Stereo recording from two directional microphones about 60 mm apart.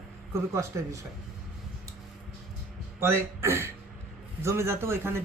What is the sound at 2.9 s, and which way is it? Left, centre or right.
A man's voice, right.